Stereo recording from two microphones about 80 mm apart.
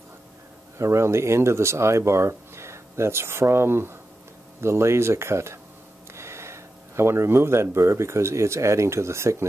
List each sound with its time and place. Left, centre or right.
0.7 s speech: right